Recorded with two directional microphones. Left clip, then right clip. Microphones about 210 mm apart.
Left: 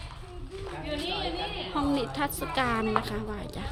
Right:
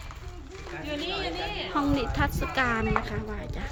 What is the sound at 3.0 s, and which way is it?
Speech, 10° left (ahead or behind).